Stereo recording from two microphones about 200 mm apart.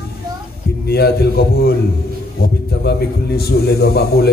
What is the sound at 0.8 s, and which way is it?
Speech, 55° left (ahead or behind).